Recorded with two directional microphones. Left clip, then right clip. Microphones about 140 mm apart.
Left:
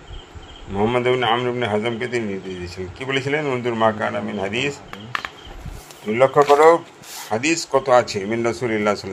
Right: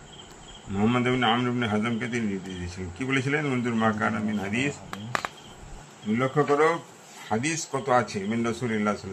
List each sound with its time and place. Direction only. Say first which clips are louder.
0.7 s a man's voice: left 7 dB; 40° left (ahead or behind)
6.1 s a man's voice: left 10 dB; 40° left (ahead or behind)